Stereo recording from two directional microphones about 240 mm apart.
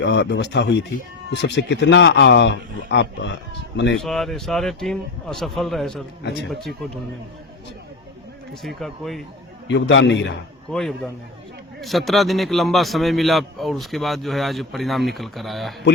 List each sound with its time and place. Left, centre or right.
0.0 s speech: left
3.9 s a man's voice: centre
8.6 s a man's voice: centre
9.6 s speech: left
10.7 s a man's voice: centre